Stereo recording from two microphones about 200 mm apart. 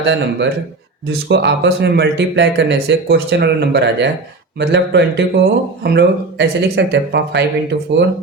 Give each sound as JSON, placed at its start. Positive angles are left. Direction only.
{"t": 0.0, "sound": "speech", "side_deg": -55}